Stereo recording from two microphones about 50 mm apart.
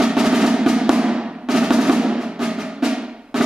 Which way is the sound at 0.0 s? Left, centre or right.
Centre.